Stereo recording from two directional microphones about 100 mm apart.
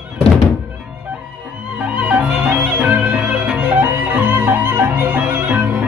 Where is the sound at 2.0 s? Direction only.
15° right (ahead or behind).